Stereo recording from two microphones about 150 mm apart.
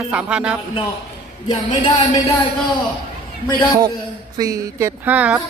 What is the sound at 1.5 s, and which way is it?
Speech, 30° left (ahead or behind).